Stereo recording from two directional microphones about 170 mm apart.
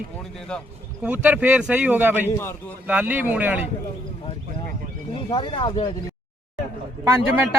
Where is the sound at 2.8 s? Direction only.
10° right (ahead or behind).